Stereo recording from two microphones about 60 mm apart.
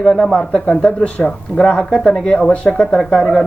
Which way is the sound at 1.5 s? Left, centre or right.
Centre.